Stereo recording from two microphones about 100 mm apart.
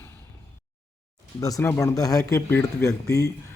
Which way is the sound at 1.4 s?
35° left (ahead or behind).